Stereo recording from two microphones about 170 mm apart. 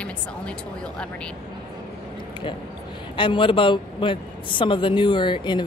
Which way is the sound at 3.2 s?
30° left (ahead or behind).